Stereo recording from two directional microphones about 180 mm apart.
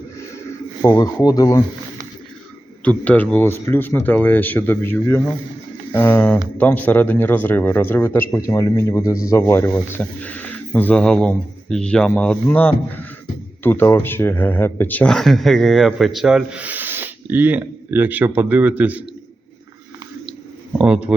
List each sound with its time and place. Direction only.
0.9 s speech: 20° left (ahead or behind)
2.8 s speech: 10° left (ahead or behind); by 19.0 s 10° right (ahead or behind)
20.7 s speech: 5° right (ahead or behind)